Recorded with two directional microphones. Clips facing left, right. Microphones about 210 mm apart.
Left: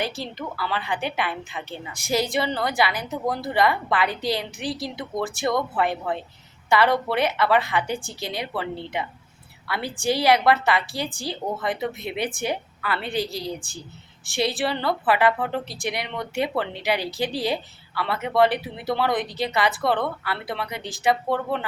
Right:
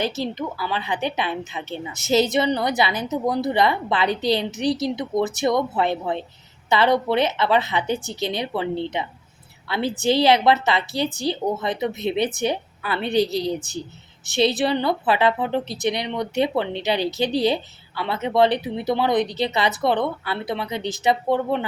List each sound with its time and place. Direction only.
0.0 s a woman's voice: 20° right (ahead or behind)